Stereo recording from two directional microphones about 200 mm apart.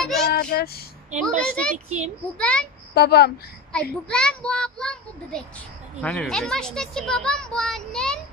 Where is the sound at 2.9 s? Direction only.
50° left (ahead or behind).